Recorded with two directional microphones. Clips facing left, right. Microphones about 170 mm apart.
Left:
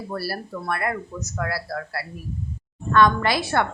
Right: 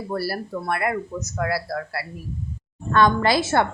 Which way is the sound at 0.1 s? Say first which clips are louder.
Right 4 dB; 20° right (ahead or behind).